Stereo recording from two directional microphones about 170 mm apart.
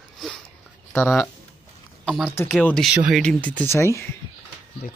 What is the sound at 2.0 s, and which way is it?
Speech, 5° left (ahead or behind).